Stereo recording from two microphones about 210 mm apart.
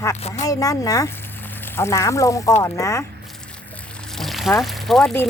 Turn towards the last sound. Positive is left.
turn(degrees=0)  # may be behind; listen again after turning